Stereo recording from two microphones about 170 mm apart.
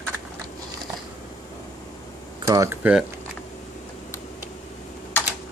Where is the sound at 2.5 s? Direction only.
20° right (ahead or behind).